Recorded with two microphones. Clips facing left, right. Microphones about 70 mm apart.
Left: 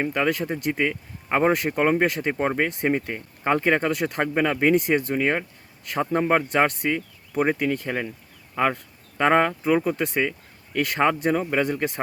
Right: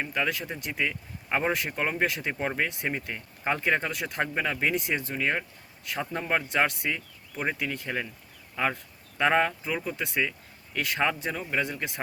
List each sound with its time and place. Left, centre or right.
0.0 s speech: left
5.2 s speech: left
5.8 s speech: left